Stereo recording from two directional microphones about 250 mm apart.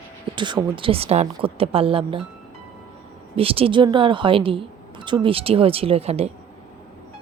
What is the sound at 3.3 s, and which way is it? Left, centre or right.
Speech, right.